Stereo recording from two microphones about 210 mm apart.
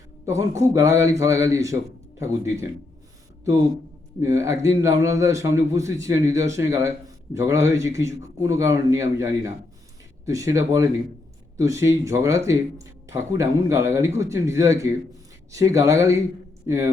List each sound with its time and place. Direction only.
0.3 s speech: 15° right (ahead or behind)
4.2 s speech: 15° right (ahead or behind)